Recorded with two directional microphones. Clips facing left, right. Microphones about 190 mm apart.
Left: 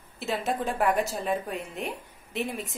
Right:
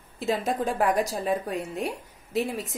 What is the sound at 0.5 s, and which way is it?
A woman's voice, 40° right (ahead or behind).